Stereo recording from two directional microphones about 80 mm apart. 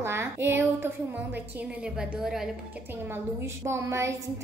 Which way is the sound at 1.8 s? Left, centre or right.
Centre.